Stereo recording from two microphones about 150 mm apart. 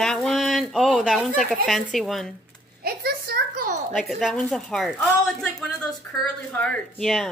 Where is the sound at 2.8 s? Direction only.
90° right.